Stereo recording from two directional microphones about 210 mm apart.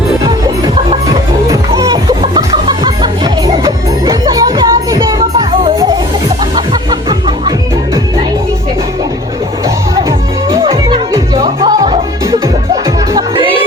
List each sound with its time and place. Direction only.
1.7 s music: 15° right (ahead or behind)
7.1 s music: 20° right (ahead or behind)
9.6 s music: 15° right (ahead or behind)
10.6 s music: 25° right (ahead or behind)